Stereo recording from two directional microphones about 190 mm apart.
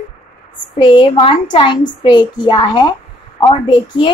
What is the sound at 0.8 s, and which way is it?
A child's voice, 25° left (ahead or behind).